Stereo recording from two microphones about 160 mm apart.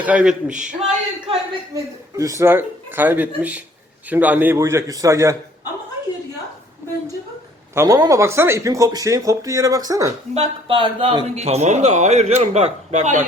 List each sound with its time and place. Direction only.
0.0 s a man's voice: 10° right (ahead or behind)
0.5 s a sound: 50° right (ahead or behind)
1.7 s a man's voice: 20° right (ahead or behind)
7.8 s speech: 25° right (ahead or behind)
10.3 s a man's voice: 35° right (ahead or behind)